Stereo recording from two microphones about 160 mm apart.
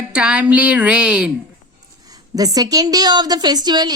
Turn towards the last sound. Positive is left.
turn(degrees=-25)  # may be behind; listen again after turning